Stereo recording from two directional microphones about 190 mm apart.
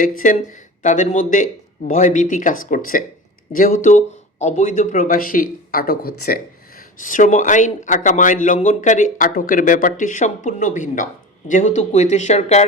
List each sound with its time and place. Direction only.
0.0 s speech: 45° left (ahead or behind)